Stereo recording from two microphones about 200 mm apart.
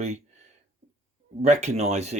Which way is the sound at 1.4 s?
35° right (ahead or behind).